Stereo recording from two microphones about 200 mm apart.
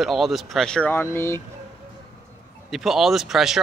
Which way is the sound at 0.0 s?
Centre (ahead or behind).